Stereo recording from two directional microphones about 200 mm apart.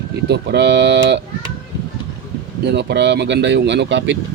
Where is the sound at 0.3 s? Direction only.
55° right (ahead or behind).